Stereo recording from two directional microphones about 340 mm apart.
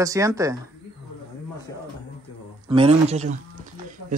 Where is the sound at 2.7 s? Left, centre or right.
Centre.